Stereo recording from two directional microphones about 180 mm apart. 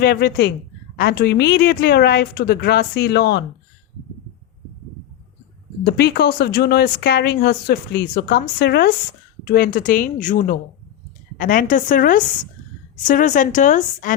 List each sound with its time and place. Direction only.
0.0 s speech: 60° left (ahead or behind)
5.8 s speech: 65° left (ahead or behind); by 14.2 s 45° left (ahead or behind)